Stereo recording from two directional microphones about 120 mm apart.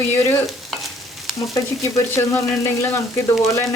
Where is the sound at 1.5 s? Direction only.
25° left (ahead or behind).